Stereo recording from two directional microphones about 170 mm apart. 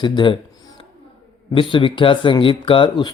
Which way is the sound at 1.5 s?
30° left (ahead or behind).